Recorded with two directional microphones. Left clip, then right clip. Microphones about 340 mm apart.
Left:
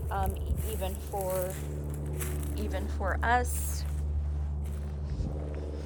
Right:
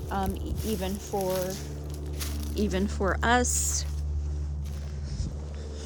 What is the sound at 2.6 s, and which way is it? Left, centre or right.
A woman's voice, right.